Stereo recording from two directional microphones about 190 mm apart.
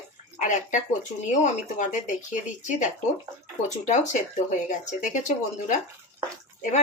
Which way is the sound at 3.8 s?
40° left (ahead or behind).